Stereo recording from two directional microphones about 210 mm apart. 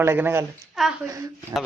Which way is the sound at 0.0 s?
10° right (ahead or behind).